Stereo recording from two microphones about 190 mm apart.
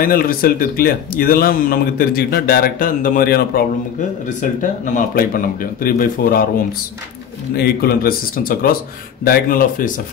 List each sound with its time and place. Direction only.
0.0 s speech: 50° left (ahead or behind)
7.5 s speech: 55° left (ahead or behind)